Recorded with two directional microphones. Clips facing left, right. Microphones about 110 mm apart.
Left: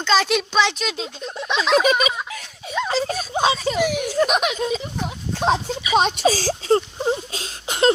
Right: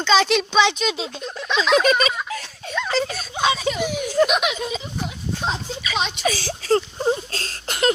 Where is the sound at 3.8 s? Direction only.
65° left (ahead or behind).